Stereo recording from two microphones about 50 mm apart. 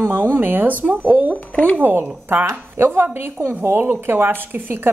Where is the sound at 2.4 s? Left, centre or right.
Right.